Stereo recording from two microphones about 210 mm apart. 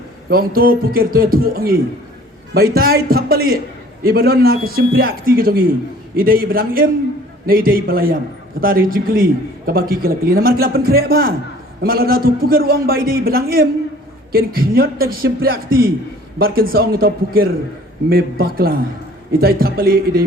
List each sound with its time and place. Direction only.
0.3 s a man's voice: 45° right (ahead or behind)